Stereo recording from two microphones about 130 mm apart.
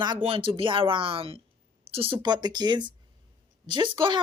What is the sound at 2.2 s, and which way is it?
Speech, 35° right (ahead or behind).